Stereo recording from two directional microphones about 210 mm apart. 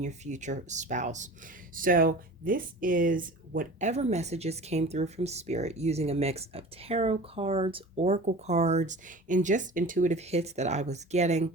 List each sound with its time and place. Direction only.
0.0 s speech: 35° right (ahead or behind)